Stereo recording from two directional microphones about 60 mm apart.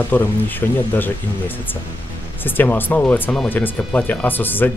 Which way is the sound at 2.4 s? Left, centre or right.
Left.